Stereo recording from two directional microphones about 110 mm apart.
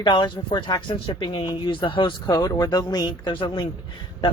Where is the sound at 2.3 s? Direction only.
35° left (ahead or behind); by 3.6 s 50° left (ahead or behind).